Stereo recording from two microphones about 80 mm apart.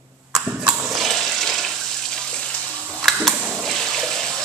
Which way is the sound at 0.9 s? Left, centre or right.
Centre.